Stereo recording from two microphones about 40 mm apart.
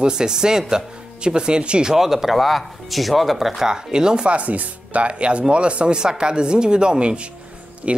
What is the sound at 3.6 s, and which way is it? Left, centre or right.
Speech, centre.